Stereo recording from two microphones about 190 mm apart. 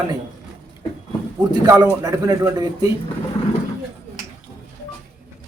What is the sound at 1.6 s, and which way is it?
Speech, 15° right (ahead or behind).